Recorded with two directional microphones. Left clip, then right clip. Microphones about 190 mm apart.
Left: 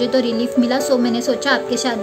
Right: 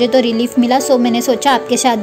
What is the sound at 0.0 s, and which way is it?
A woman's voice, 10° right (ahead or behind).